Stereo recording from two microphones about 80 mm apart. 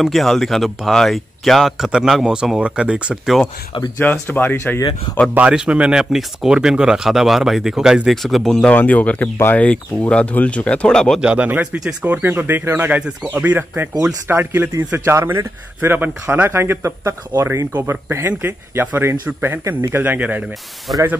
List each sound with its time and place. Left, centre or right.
0.0 s speech: centre
4.0 s speech: left
5.5 s speech: centre
8.7 s speech: centre
11.1 s a man's voice: centre; by 17.6 s right
17.7 s a man's voice: right